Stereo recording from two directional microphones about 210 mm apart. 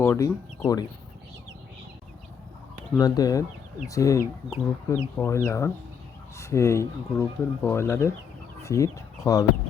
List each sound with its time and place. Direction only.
0.0 s speech: 15° left (ahead or behind)
3.0 s speech: 15° left (ahead or behind)